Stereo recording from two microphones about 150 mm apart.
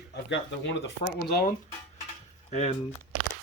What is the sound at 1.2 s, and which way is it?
Speech, 80° left.